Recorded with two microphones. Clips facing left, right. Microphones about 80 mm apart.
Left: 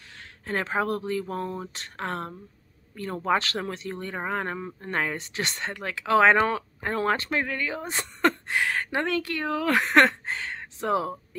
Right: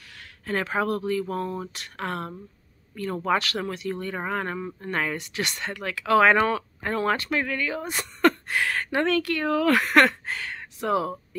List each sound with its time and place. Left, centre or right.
0.1 s speech: left